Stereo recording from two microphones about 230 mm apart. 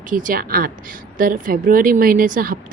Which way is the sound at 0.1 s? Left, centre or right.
Right.